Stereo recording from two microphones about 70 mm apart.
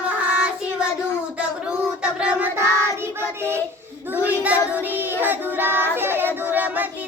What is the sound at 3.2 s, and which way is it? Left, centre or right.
Speech, right.